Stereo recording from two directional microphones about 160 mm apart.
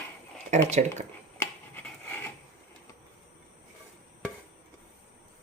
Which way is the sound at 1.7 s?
10° left (ahead or behind).